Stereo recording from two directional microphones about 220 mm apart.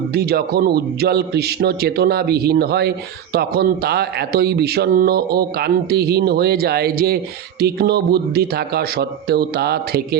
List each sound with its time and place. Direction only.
0.1 s a man's voice: 45° right (ahead or behind)